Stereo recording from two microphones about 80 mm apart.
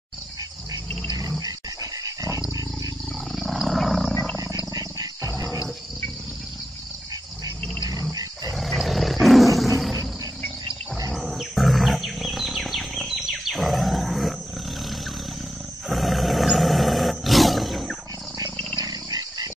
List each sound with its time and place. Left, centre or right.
1.4 s dog: right
3.3 s wild animals: centre
4.7 s wild animals: right
8.5 s roar: centre
11.1 s wild animals: centre
15.9 s roar: centre
18.8 s dog: right